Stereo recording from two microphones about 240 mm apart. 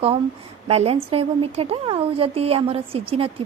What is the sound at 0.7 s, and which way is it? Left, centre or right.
Speech, right.